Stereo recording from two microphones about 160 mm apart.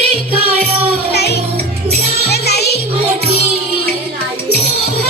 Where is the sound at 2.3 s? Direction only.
90° left.